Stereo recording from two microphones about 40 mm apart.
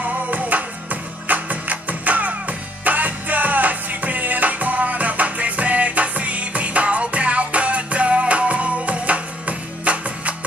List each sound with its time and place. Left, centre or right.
0.0 s music: right